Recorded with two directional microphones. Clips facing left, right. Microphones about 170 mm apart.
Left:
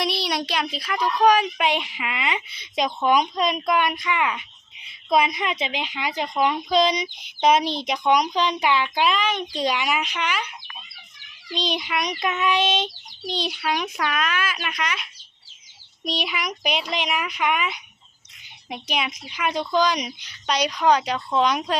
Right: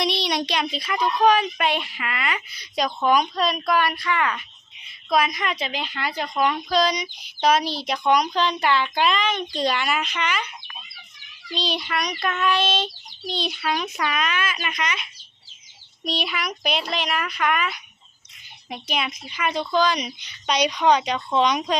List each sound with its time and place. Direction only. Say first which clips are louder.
0.0 s a child's voice: right 1 dB; 5° left (ahead or behind)
1.0 s speech: left 1 dB; 10° left (ahead or behind)
11.5 s speech: left 1 dB; 15° left (ahead or behind)
16.0 s speech: even; 15° left (ahead or behind)
20.5 s speech: right 1 dB; centre (ahead or behind)